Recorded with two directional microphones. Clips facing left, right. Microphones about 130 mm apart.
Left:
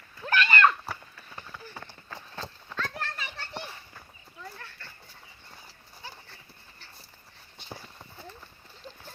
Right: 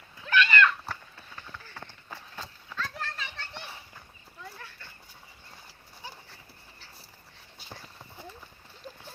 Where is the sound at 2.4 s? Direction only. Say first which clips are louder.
Left 2 dB; centre (ahead or behind).